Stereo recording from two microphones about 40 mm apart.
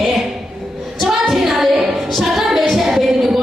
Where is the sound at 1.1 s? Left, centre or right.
Centre.